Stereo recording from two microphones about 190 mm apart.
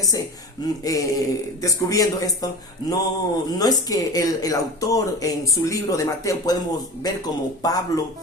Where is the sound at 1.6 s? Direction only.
20° left (ahead or behind).